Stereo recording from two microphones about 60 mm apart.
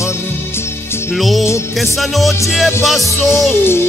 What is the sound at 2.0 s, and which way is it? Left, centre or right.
Music, centre.